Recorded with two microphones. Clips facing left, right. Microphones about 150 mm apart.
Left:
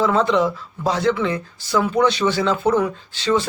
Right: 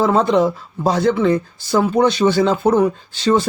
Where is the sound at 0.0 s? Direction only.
45° right (ahead or behind).